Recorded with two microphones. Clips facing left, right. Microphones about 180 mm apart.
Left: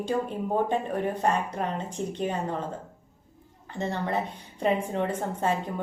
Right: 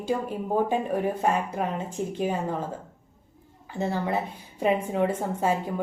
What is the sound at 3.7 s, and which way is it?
Speech, 5° right (ahead or behind).